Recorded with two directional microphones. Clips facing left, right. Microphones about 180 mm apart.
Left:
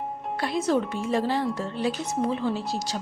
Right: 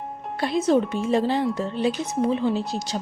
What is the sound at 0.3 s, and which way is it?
Speech, 20° right (ahead or behind).